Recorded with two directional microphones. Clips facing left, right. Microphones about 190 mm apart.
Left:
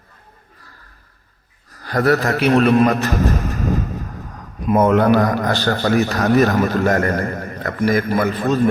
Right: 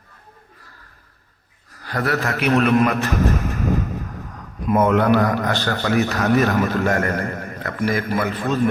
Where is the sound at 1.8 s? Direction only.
40° left (ahead or behind).